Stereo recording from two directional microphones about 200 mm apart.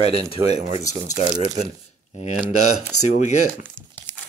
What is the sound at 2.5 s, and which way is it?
Speech, 90° left.